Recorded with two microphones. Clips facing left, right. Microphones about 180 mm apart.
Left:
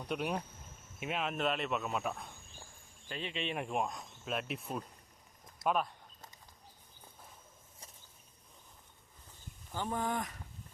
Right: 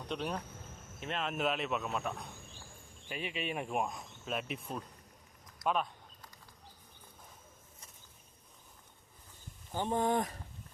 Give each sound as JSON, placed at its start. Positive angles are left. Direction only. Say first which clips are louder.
{"t": 0.1, "sound": "speech", "louder": "left 2 dB", "side_deg": 10}
{"t": 3.1, "sound": "speech", "louder": "right 1 dB", "side_deg": -10}
{"t": 9.7, "sound": "speech", "louder": "right 4 dB", "side_deg": -25}